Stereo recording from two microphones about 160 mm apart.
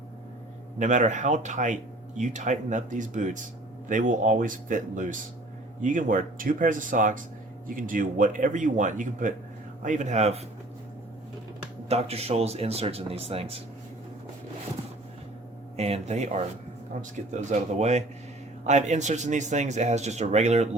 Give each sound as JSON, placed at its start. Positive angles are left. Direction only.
{"t": 0.8, "sound": "speech", "side_deg": -50}
{"t": 11.9, "sound": "speech", "side_deg": -40}
{"t": 15.7, "sound": "speech", "side_deg": -40}